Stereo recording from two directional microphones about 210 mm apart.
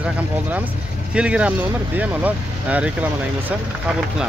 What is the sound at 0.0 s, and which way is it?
Speech, 5° right (ahead or behind).